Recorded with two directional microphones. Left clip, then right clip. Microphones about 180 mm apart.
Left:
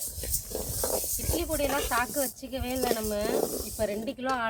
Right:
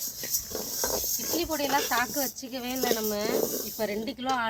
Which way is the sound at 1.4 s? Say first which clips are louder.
Right 1 dB; 45° left (ahead or behind).